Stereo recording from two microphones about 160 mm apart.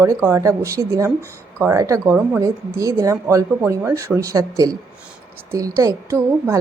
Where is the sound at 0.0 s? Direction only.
15° right (ahead or behind).